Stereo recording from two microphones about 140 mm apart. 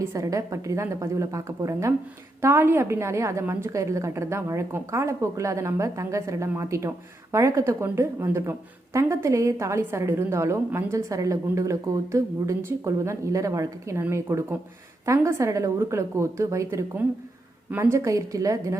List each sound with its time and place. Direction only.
0.0 s a woman's voice: 20° right (ahead or behind)